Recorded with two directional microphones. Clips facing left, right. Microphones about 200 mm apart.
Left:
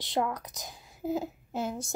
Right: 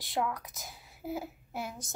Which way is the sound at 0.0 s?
20° left (ahead or behind).